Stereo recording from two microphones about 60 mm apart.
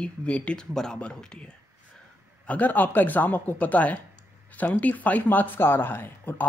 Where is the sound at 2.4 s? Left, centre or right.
Left.